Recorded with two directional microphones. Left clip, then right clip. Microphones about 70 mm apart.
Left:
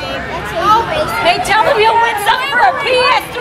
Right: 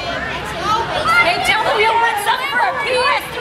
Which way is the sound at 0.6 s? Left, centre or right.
Left.